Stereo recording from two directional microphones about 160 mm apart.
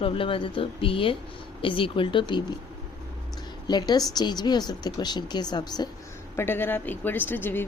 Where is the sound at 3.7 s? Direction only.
25° left (ahead or behind).